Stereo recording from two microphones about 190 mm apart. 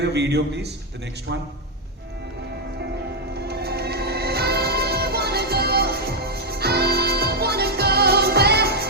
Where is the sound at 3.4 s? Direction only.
60° right (ahead or behind).